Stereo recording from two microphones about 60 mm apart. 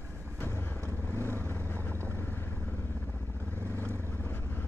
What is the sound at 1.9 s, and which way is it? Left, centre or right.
Vehicle, right.